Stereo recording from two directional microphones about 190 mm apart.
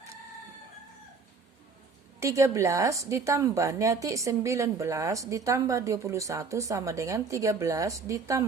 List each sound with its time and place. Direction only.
2.2 s a woman's voice: 15° right (ahead or behind)